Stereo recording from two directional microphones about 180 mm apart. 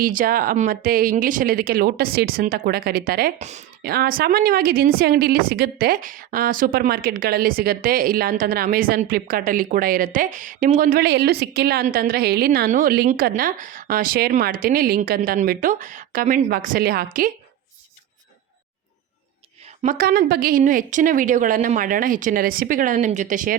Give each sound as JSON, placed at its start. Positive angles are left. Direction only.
{"t": 0.0, "sound": "a woman's voice", "side_deg": -50}
{"t": 3.3, "sound": "speech", "side_deg": -40}
{"t": 3.8, "sound": "a woman's voice", "side_deg": -60}
{"t": 19.8, "sound": "a woman's voice", "side_deg": -50}